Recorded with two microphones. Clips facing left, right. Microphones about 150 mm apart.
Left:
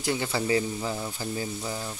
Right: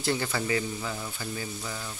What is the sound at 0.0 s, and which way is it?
Speech, 15° left (ahead or behind).